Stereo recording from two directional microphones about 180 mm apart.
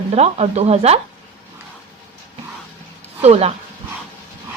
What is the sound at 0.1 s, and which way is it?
Speech, 35° right (ahead or behind).